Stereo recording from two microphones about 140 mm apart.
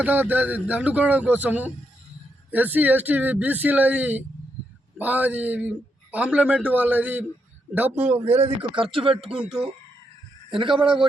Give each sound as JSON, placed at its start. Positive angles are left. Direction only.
{"t": 0.0, "sound": "a man's voice", "side_deg": -10}
{"t": 8.4, "sound": "speech", "side_deg": -40}
{"t": 9.3, "sound": "speech", "side_deg": -5}
{"t": 10.6, "sound": "speech", "side_deg": -35}